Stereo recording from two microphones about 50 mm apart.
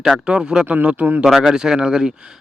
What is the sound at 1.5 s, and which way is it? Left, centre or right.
Speech, centre.